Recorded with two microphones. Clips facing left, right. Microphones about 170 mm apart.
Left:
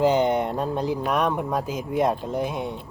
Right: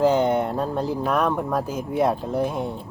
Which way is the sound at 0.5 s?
15° left (ahead or behind).